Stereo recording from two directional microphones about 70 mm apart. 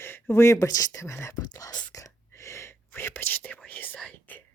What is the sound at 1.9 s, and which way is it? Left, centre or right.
Whispering, left.